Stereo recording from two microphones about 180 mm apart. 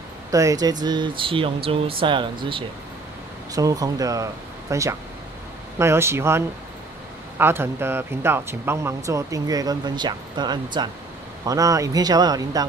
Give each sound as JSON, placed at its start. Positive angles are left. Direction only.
{"t": 0.3, "sound": "speech", "side_deg": -20}